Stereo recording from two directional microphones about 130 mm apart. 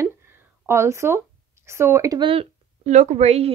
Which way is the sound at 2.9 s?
60° right (ahead or behind).